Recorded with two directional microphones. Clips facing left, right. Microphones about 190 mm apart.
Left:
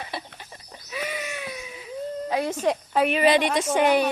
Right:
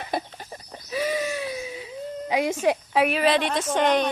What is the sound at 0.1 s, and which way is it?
Chicken, 40° right (ahead or behind).